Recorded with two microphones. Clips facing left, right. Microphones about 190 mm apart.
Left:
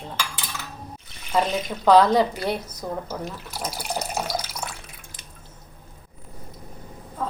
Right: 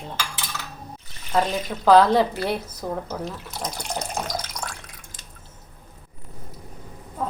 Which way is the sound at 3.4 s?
5° left (ahead or behind).